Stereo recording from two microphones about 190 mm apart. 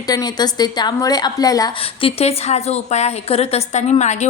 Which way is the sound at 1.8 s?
30° left (ahead or behind).